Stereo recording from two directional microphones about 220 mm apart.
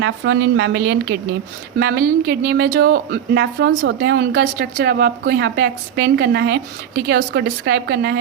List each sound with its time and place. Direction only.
0.0 s a woman's voice: 55° right (ahead or behind)